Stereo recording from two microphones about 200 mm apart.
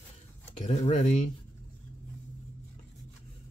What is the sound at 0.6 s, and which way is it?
Speech, 35° left (ahead or behind).